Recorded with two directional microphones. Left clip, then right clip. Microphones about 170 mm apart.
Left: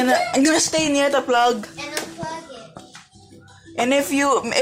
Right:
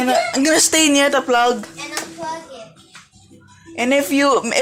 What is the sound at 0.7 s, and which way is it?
Speech, 35° right (ahead or behind).